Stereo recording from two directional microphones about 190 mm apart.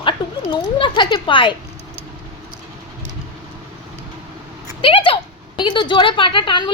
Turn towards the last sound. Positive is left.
turn(degrees=25)  # may be behind; listen again after turning